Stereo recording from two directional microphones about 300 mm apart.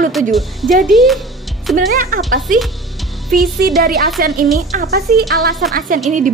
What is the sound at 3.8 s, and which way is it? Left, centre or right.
A woman's voice, right.